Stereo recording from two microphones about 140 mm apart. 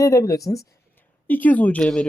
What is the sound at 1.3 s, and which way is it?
Speech, 10° left (ahead or behind).